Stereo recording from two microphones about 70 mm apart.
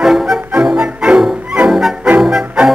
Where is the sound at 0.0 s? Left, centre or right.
Centre.